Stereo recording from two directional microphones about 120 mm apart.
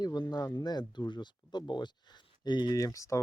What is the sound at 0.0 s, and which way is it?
Speech, 35° left (ahead or behind).